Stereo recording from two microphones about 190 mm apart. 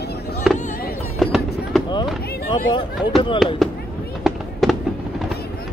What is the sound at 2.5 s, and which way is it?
Speech, 25° left (ahead or behind).